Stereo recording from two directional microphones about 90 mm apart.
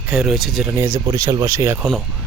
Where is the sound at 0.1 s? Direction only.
10° right (ahead or behind).